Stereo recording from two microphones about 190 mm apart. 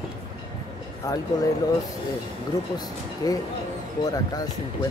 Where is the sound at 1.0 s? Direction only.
15° left (ahead or behind).